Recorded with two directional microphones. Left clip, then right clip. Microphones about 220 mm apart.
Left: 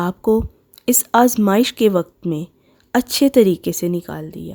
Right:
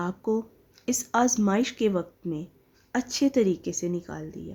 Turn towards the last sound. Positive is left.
turn(degrees=45)  # may be behind; listen again after turning